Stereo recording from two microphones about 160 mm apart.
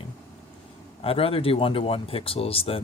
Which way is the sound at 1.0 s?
35° left (ahead or behind).